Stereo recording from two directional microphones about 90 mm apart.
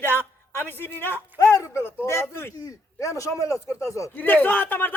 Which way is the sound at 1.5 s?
35° left (ahead or behind).